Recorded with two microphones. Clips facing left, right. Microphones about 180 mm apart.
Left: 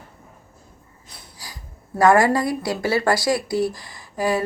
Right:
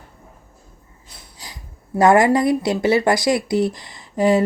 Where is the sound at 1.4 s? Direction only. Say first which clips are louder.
Right 2 dB; 20° right (ahead or behind).